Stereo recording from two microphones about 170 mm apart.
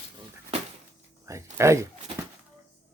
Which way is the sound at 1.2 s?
15° right (ahead or behind).